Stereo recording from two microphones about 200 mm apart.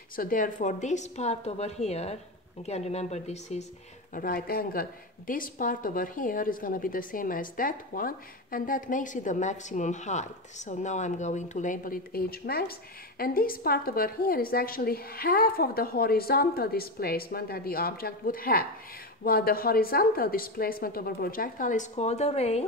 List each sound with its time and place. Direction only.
0.1 s a woman's voice: 45° left (ahead or behind)
4.1 s speech: 45° left (ahead or behind)